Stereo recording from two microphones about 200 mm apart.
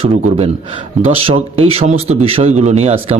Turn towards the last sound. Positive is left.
turn(degrees=-30)  # may be behind; listen again after turning